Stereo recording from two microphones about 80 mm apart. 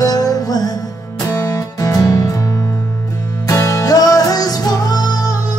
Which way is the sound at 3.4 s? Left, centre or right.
Left.